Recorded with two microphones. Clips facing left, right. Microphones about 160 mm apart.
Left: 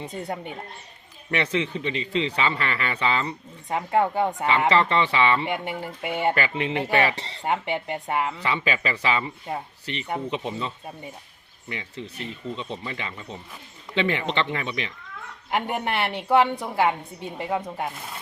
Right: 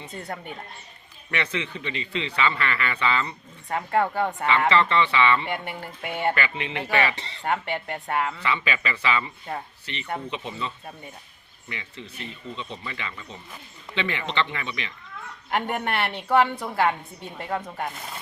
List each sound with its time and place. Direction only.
0.1 s a woman's voice: 15° left (ahead or behind)
1.3 s a man's voice: 35° left (ahead or behind)
3.7 s a woman's voice: 15° left (ahead or behind)
4.7 s a man's voice: 40° left (ahead or behind)
5.5 s a woman's voice: 15° left (ahead or behind)
6.3 s a man's voice: 40° left (ahead or behind)
7.4 s a woman's voice: 15° left (ahead or behind)
8.6 s a man's voice: 40° left (ahead or behind)
11.7 s a man's voice: 40° left (ahead or behind)
15.4 s a woman's voice: 10° left (ahead or behind)